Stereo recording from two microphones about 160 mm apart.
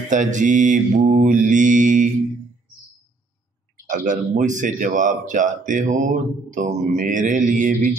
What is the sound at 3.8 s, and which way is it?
Speech, 55° right (ahead or behind).